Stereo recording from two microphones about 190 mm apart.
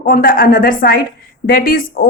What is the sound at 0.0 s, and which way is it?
A woman's voice, 50° left (ahead or behind).